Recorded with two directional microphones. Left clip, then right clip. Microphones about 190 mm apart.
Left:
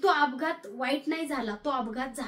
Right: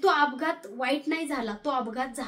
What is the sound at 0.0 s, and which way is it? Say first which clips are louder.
A woman's voice: right 2 dB; 25° right (ahead or behind).